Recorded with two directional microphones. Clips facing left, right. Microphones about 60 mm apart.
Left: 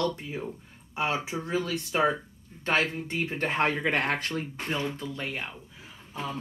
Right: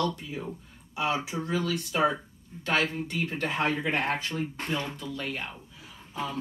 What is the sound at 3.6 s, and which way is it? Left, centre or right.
Speech, left.